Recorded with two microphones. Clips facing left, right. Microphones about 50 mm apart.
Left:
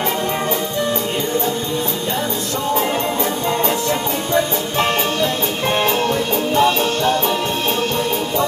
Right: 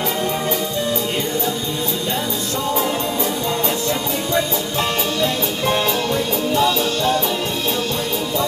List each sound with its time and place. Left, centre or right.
4.3 s music: left